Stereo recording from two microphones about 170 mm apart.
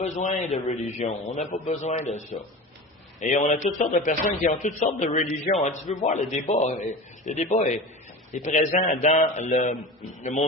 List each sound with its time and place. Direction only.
0.0 s a man's voice: 50° left (ahead or behind)